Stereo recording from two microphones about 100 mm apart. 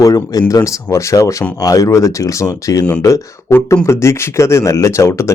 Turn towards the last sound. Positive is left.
turn(degrees=30)  # may be behind; listen again after turning